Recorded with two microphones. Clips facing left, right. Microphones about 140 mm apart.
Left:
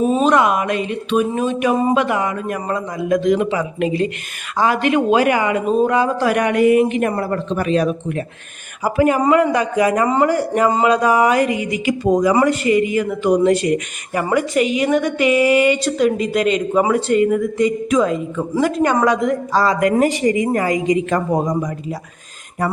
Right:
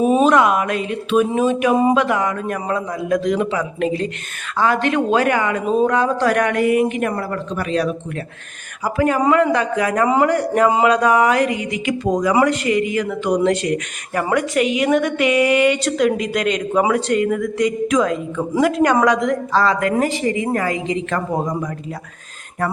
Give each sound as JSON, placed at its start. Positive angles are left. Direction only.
{"t": 0.0, "sound": "speech", "side_deg": -10}
{"t": 0.3, "sound": "a man's voice", "side_deg": 0}
{"t": 6.7, "sound": "a woman's voice", "side_deg": 25}